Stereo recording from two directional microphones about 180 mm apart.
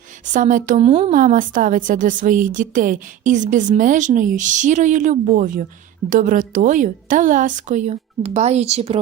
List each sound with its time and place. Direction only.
0.3 s a woman's voice: 45° right (ahead or behind)
0.9 s speech: 30° right (ahead or behind)
1.1 s a woman's voice: 50° right (ahead or behind)